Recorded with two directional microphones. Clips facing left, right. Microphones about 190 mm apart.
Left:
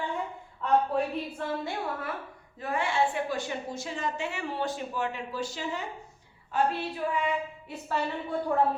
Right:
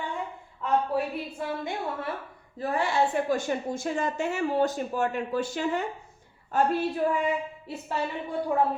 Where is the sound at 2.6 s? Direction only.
35° right (ahead or behind).